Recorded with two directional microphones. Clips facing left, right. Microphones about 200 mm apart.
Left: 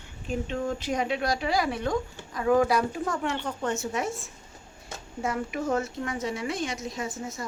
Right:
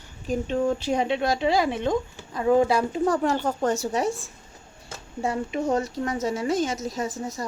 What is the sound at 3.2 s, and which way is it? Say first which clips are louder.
Speech: right 6 dB; 40° right (ahead or behind).